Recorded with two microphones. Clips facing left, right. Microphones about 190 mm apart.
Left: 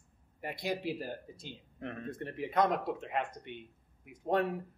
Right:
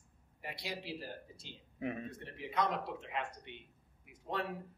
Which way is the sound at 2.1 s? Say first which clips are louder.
Left 6 dB; 50° left (ahead or behind).